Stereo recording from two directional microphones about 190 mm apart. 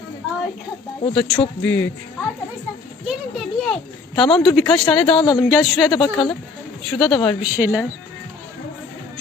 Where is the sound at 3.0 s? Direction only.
Centre (ahead or behind).